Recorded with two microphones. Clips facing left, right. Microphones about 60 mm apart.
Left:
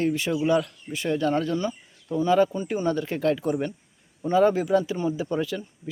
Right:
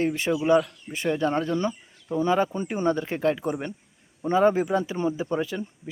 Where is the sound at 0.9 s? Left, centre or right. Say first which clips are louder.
Even; right.